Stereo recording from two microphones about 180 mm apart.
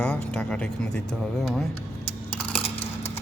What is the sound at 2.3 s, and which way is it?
Coin, 5° left (ahead or behind).